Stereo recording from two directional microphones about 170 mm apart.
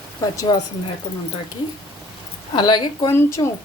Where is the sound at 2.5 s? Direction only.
25° left (ahead or behind).